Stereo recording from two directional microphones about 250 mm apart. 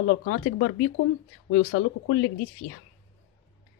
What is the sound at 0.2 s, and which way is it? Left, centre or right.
Speech, left.